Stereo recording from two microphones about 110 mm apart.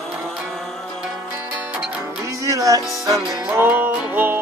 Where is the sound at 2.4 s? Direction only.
30° right (ahead or behind).